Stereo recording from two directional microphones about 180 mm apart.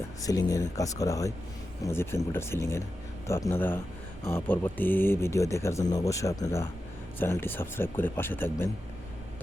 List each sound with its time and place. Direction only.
0.2 s speech: 20° left (ahead or behind)